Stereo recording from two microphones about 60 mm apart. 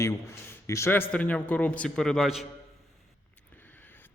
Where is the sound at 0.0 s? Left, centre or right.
Left.